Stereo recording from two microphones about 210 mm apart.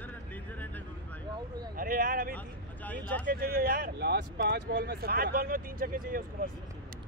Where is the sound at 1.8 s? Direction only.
40° right (ahead or behind).